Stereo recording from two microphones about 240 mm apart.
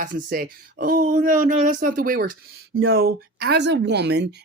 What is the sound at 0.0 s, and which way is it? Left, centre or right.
A woman's voice, right.